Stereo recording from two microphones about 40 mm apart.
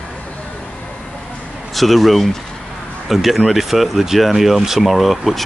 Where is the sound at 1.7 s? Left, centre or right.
Centre.